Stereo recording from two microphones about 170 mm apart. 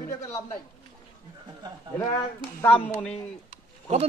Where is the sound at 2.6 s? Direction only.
10° left (ahead or behind).